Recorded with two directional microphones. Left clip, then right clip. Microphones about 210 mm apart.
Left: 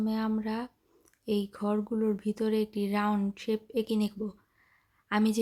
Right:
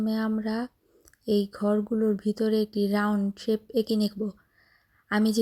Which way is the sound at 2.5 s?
40° left (ahead or behind).